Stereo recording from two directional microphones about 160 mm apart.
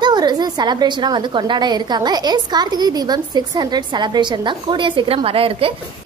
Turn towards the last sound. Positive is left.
turn(degrees=-35)  # may be behind; listen again after turning